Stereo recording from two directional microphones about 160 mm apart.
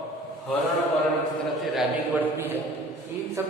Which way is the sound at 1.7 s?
10° right (ahead or behind).